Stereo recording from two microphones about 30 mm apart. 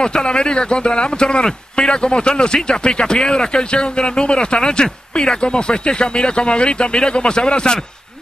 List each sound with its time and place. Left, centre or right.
0.0 s speech: left